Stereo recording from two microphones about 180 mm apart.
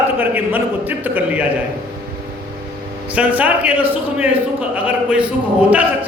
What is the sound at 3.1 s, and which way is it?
A man's voice, 10° right (ahead or behind).